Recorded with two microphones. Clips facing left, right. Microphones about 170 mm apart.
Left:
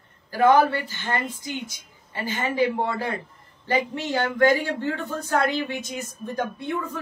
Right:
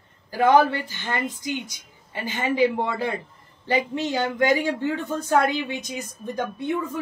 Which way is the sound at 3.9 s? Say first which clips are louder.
Right 1 dB; 20° right (ahead or behind).